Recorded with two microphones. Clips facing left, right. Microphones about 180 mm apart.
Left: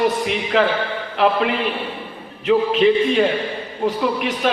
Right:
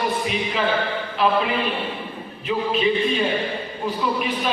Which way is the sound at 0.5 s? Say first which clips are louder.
Left 8 dB; 70° left (ahead or behind).